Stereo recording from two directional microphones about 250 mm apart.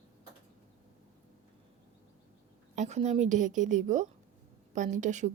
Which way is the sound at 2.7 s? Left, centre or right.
Right.